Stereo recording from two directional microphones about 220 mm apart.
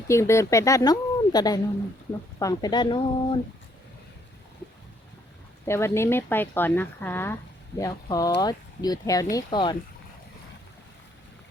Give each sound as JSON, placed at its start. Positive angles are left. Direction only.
{"t": 0.1, "sound": "speech", "side_deg": 10}
{"t": 5.6, "sound": "speech", "side_deg": 10}